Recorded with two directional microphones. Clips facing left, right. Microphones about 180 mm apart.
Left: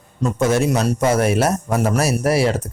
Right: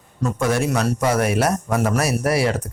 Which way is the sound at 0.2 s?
20° left (ahead or behind).